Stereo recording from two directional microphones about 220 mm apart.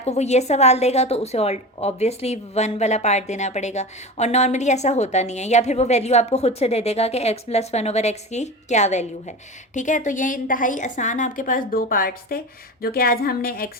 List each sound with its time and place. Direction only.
0.0 s a woman's voice: 30° left (ahead or behind)